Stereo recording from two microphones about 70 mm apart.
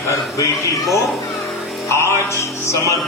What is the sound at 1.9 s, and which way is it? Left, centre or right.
Music, left.